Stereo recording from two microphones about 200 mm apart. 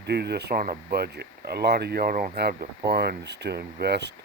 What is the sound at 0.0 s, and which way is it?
Speech, 55° right (ahead or behind).